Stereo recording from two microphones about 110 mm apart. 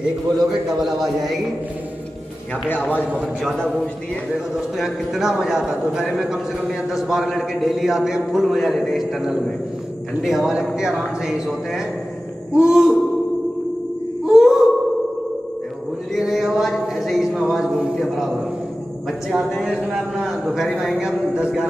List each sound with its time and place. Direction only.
0.7 s a man's voice: 5° right (ahead or behind)
2.7 s a man's voice: 15° left (ahead or behind)
3.2 s a man's voice: 5° left (ahead or behind)
4.6 s a man's voice: 5° right (ahead or behind)
14.2 s a sound: 5° right (ahead or behind)
16.1 s a sound: 5° right (ahead or behind)
19.0 s a man's voice: centre (ahead or behind)